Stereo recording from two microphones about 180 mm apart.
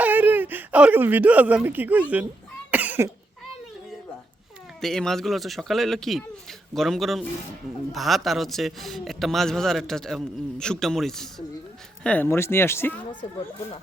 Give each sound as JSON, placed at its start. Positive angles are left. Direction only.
{"t": 0.0, "sound": "speech", "side_deg": -10}
{"t": 2.6, "sound": "cough", "side_deg": -10}
{"t": 4.8, "sound": "a man's voice", "side_deg": 0}
{"t": 13.2, "sound": "speech", "side_deg": 30}